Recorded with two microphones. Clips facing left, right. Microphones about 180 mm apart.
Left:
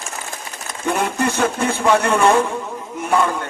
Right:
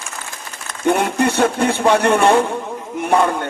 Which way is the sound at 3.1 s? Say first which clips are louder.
Right 2 dB; 30° right (ahead or behind).